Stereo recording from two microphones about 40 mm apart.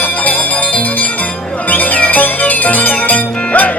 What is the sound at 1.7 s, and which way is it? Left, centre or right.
Music, left.